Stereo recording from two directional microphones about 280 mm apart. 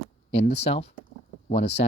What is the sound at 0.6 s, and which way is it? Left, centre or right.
Speech, left.